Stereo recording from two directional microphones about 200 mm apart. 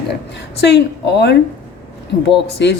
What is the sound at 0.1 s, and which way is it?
Speech, 60° left (ahead or behind).